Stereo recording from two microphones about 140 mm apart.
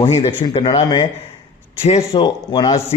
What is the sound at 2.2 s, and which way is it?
Speech, 30° left (ahead or behind).